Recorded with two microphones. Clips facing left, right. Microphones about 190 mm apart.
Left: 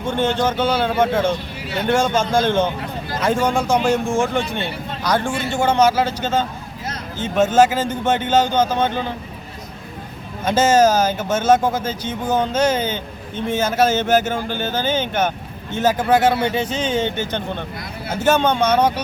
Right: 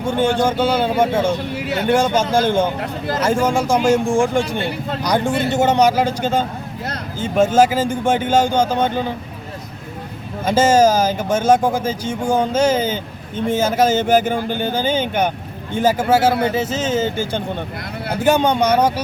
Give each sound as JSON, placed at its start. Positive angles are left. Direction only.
{"t": 0.2, "sound": "speech", "side_deg": -10}
{"t": 10.4, "sound": "speech", "side_deg": -10}